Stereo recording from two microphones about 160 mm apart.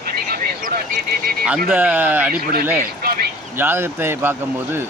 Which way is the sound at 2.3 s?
65° right (ahead or behind).